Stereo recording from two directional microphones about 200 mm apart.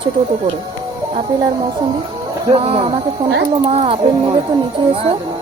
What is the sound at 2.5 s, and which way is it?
Speech, 30° right (ahead or behind).